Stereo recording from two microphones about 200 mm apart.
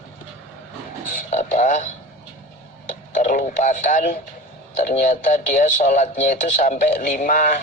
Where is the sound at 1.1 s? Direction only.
35° left (ahead or behind).